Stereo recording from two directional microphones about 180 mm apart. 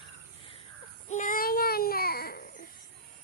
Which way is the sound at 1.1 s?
45° left (ahead or behind).